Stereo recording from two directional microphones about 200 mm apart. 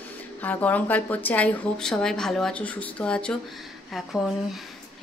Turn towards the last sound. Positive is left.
turn(degrees=0)  # may be behind; listen again after turning